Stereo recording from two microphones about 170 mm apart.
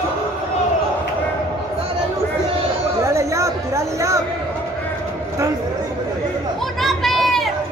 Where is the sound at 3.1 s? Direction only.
20° right (ahead or behind).